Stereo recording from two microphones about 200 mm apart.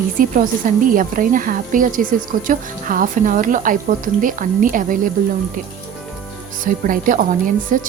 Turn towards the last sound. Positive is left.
turn(degrees=-40)  # may be behind; listen again after turning